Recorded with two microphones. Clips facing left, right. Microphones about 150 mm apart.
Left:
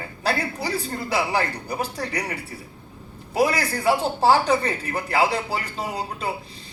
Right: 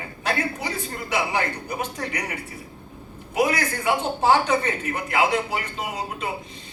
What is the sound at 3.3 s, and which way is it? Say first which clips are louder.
Speech: left 1 dB; 35° left (ahead or behind).